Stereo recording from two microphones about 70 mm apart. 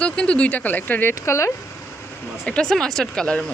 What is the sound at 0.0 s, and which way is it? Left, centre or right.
Speech, centre.